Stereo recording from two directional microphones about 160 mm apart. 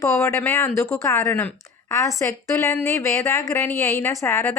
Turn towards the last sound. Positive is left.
turn(degrees=15)  # may be behind; listen again after turning